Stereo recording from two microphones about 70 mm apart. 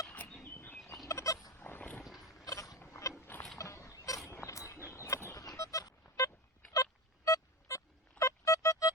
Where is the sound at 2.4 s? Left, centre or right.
Left.